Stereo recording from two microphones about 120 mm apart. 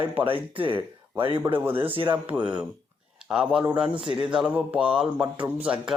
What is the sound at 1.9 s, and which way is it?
Speech, 45° right (ahead or behind).